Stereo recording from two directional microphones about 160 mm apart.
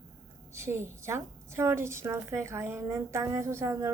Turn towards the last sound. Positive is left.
turn(degrees=-15)  # may be behind; listen again after turning